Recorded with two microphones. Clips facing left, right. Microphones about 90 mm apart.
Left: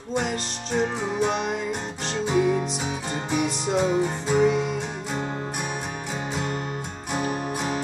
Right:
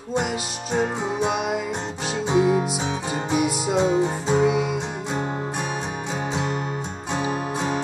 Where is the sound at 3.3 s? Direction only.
5° right (ahead or behind).